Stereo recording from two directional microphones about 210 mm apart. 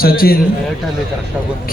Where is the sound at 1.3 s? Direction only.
5° right (ahead or behind).